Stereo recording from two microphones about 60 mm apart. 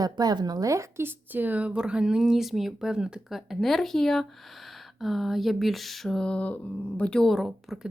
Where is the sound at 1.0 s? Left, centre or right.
Right.